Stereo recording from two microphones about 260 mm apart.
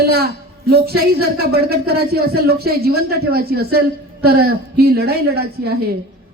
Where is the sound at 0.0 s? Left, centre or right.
Right.